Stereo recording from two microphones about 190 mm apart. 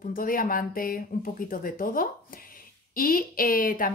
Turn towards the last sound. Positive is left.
turn(degrees=45)  # may be behind; listen again after turning